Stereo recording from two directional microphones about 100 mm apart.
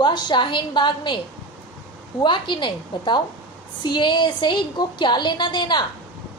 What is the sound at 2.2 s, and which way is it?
A woman's voice, 50° left (ahead or behind).